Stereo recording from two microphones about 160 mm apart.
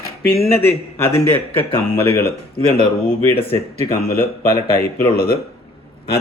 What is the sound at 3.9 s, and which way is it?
A man's voice, 70° left (ahead or behind).